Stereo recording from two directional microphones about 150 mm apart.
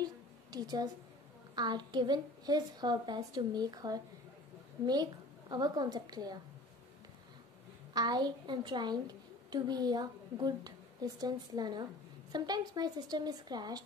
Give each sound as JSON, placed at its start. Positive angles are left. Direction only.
{"t": 0.0, "sound": "a sound", "side_deg": -25}
{"t": 1.5, "sound": "a woman's voice", "side_deg": -30}
{"t": 7.9, "sound": "a woman's voice", "side_deg": -30}